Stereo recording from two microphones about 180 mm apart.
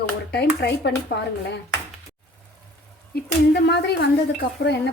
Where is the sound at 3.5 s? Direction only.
70° left (ahead or behind).